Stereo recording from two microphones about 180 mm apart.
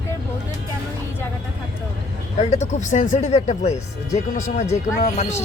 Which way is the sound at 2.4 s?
40° left (ahead or behind).